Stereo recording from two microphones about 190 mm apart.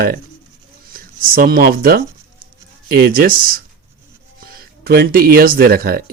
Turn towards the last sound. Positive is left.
turn(degrees=-50)  # may be behind; listen again after turning